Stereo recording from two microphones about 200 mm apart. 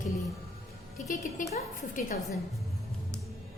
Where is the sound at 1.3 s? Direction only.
35° left (ahead or behind).